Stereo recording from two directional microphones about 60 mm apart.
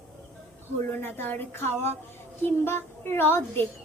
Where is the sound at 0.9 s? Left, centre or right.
Left.